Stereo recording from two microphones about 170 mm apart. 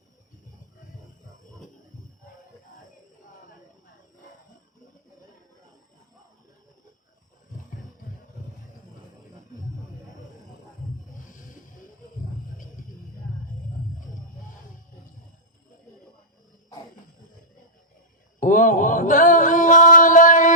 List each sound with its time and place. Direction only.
18.3 s mantra: 50° left (ahead or behind)